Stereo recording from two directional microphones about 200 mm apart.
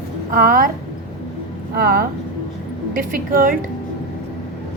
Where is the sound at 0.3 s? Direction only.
45° right (ahead or behind).